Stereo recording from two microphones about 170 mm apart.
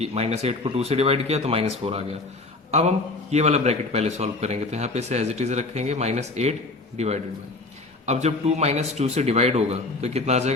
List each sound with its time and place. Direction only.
0.0 s speech: 40° right (ahead or behind)
3.3 s speech: 40° right (ahead or behind)